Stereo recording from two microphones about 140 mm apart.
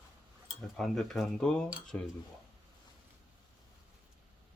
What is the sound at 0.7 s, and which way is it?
Speech, 5° left (ahead or behind).